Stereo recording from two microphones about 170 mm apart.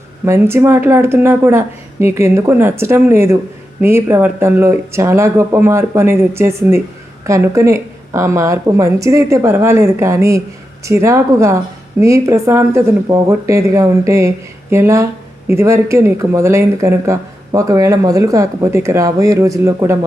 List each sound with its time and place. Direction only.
0.3 s a woman's voice: 15° right (ahead or behind)